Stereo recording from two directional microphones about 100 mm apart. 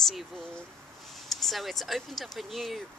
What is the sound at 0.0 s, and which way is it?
Speech, 5° left (ahead or behind).